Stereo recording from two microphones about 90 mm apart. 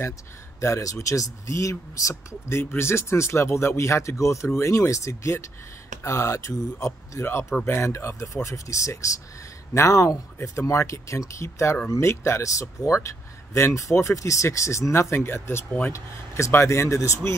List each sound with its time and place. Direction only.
0.6 s speech: 35° left (ahead or behind)
2.6 s speech: 25° left (ahead or behind)